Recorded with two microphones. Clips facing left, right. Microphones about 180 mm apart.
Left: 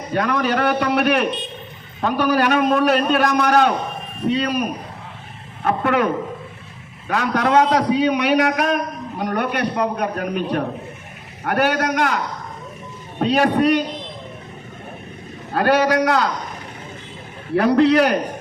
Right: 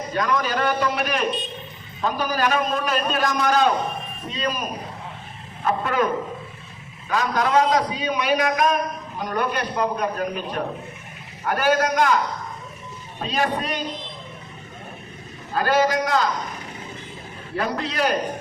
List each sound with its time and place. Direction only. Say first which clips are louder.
0.1 s a man's voice: left 4 dB; 60° left (ahead or behind)
7.1 s a man's voice: left 3 dB; 60° left (ahead or behind)
15.5 s a man's voice: left 4 dB; 65° left (ahead or behind)
17.5 s a man's voice: left 12 dB; 65° left (ahead or behind)